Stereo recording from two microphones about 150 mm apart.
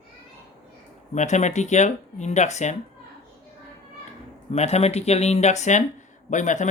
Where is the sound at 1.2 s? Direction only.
50° left (ahead or behind).